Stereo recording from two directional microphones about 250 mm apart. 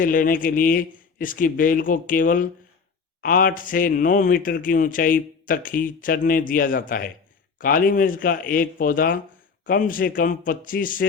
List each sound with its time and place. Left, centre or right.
0.0 s speech: left